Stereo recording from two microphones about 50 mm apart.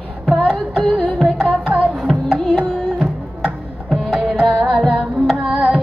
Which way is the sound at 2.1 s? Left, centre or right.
Right.